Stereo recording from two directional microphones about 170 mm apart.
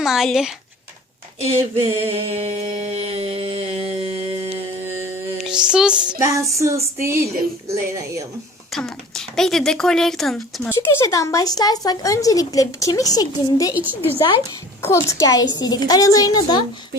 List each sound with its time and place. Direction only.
0.0 s speech: centre (ahead or behind)
1.5 s a sound: 35° right (ahead or behind)
5.4 s music: 5° right (ahead or behind)
6.1 s music: 20° right (ahead or behind)
8.7 s speech: 5° left (ahead or behind)
10.7 s speech: 15° left (ahead or behind)
14.8 s speech: 20° left (ahead or behind)